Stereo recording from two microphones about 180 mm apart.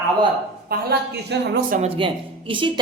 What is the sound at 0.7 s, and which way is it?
A woman's voice, 60° right (ahead or behind).